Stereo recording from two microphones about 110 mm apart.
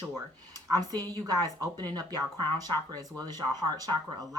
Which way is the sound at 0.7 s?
35° right (ahead or behind).